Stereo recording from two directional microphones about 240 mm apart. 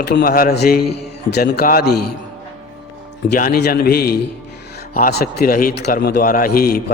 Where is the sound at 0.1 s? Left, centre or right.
Left.